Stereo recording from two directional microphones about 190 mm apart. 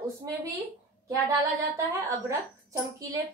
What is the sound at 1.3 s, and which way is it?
A woman's voice, 15° right (ahead or behind).